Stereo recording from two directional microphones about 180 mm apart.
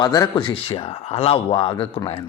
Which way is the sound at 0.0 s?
20° left (ahead or behind).